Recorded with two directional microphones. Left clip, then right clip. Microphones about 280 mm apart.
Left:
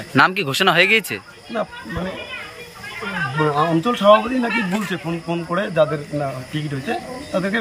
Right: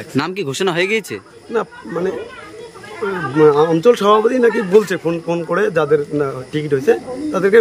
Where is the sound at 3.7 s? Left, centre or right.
Centre.